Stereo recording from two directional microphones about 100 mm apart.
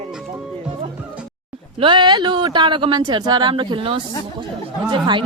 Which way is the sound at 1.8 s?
50° right (ahead or behind).